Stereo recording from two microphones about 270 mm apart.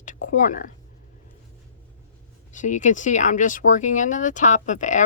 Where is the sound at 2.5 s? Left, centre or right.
Left.